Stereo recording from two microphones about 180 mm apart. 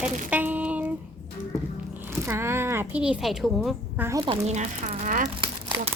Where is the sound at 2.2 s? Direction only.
15° right (ahead or behind).